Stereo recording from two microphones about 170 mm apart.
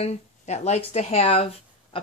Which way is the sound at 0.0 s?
40° left (ahead or behind).